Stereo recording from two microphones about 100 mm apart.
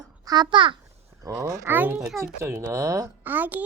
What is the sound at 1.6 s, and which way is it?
Speech, 20° right (ahead or behind).